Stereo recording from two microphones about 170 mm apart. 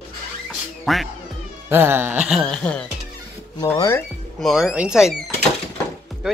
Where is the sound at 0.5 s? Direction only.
Centre (ahead or behind).